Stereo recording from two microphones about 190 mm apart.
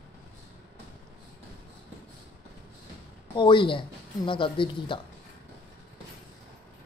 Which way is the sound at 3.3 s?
25° left (ahead or behind).